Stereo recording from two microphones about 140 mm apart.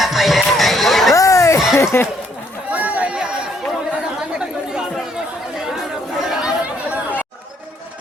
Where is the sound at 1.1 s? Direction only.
25° left (ahead or behind).